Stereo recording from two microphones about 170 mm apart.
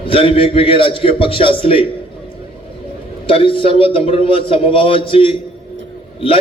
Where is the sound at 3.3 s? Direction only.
35° left (ahead or behind).